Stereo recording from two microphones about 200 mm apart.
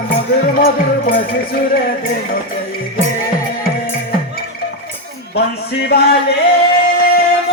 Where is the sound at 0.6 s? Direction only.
45° left (ahead or behind).